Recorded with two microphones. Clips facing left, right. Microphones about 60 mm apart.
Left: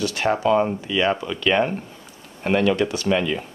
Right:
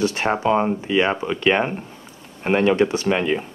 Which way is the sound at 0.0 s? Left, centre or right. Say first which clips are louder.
Right 1 dB; right.